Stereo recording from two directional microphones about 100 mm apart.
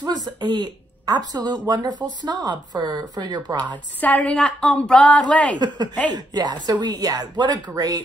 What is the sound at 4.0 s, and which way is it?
A woman's voice, 10° left (ahead or behind).